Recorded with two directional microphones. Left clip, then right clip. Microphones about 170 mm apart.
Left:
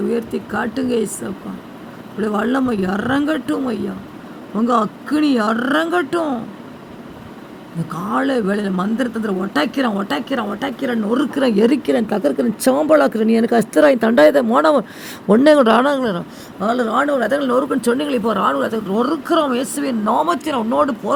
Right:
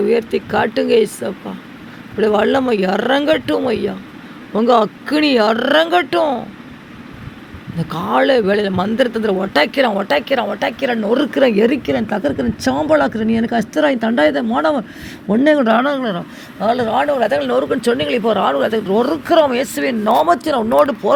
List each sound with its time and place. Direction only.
0.1 s a man's voice: 30° right (ahead or behind)
7.9 s a man's voice: 30° right (ahead or behind)
11.5 s speech: centre (ahead or behind)
11.8 s speech: 10° left (ahead or behind)
16.6 s a man's voice: 10° right (ahead or behind)